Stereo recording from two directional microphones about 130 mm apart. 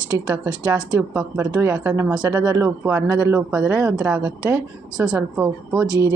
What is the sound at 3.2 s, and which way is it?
Speech, 10° right (ahead or behind).